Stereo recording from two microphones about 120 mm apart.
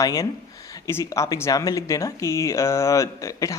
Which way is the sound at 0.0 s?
30° left (ahead or behind).